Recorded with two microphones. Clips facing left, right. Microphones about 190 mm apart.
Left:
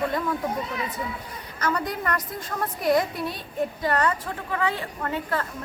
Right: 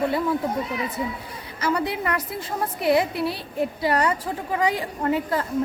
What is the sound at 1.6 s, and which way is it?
A woman's voice, 10° right (ahead or behind).